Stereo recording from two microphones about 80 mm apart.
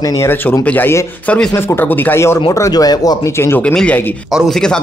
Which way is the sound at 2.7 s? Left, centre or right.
Left.